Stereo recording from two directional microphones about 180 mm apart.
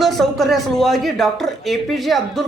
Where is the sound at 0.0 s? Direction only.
Centre (ahead or behind).